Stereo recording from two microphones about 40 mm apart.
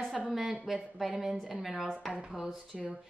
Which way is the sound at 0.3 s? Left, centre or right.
Centre.